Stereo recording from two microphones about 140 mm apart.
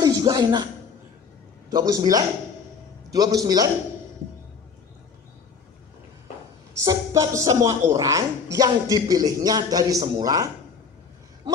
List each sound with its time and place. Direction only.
0.0 s a sound: 30° right (ahead or behind)
1.8 s speech: 25° right (ahead or behind)
6.8 s speech: 25° right (ahead or behind)